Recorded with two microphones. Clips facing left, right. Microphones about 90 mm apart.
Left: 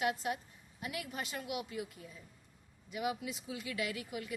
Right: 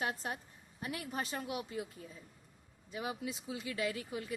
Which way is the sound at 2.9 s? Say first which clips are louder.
Left 2 dB; 30° right (ahead or behind).